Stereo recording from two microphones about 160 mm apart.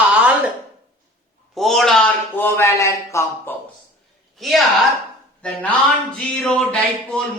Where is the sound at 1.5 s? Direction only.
Centre (ahead or behind).